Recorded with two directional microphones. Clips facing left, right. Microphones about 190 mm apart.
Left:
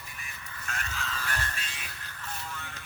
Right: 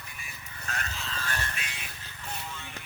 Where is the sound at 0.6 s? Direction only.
35° right (ahead or behind).